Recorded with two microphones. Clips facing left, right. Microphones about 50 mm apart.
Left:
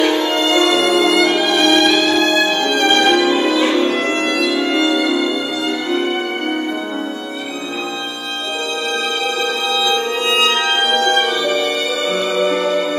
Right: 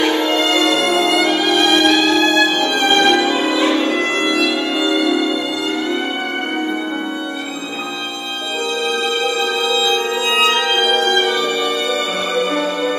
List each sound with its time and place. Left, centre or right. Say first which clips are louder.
0.3 s music: left 1 dB; centre
0.9 s violin: left 2 dB; centre
1.3 s music: left 1 dB; centre
9.4 s music: right 1 dB; centre
11.4 s music: left 1 dB; right